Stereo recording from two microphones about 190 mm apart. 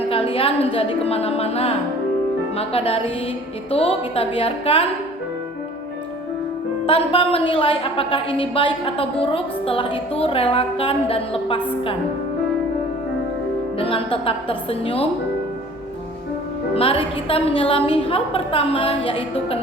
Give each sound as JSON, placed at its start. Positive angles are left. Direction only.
{"t": 0.1, "sound": "a woman's voice", "side_deg": 30}
{"t": 6.8, "sound": "a woman's voice", "side_deg": 30}
{"t": 13.7, "sound": "a woman's voice", "side_deg": 30}
{"t": 16.7, "sound": "a woman's voice", "side_deg": 30}